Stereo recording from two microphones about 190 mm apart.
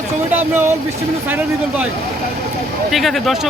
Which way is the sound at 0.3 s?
10° right (ahead or behind).